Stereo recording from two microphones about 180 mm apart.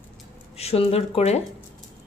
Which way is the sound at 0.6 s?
35° left (ahead or behind).